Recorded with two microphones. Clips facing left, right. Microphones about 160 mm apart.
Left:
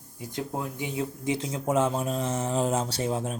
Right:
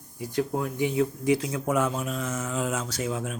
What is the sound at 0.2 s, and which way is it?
Speech, 20° left (ahead or behind).